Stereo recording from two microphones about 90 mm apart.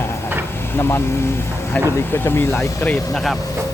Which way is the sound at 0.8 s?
25° left (ahead or behind).